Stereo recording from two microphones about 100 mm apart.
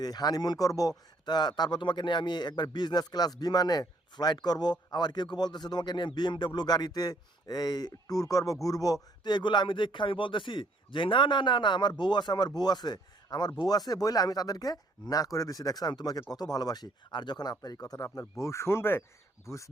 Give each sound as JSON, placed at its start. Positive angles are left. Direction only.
{"t": 0.0, "sound": "a man's voice", "side_deg": 40}